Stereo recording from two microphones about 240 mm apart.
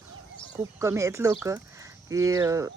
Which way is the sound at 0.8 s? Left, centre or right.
Centre.